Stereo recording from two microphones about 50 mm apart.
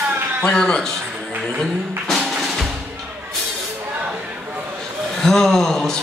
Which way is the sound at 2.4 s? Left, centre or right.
Centre.